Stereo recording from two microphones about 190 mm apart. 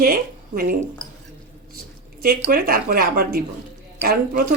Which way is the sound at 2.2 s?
50° right (ahead or behind).